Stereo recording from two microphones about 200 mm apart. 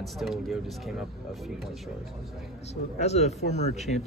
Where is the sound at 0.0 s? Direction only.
Centre (ahead or behind).